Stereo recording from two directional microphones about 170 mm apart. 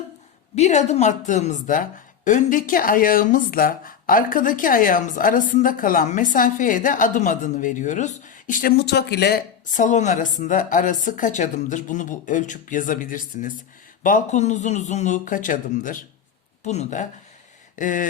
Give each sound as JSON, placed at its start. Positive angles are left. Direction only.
{"t": 0.5, "sound": "a woman's voice", "side_deg": 45}
{"t": 9.7, "sound": "a woman's voice", "side_deg": 45}